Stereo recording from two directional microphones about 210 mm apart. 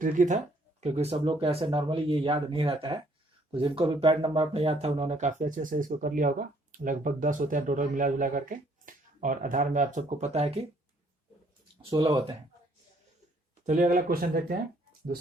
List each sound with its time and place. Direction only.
0.0 s speech: 35° right (ahead or behind)
11.9 s speech: 20° right (ahead or behind)
13.7 s speech: 40° right (ahead or behind)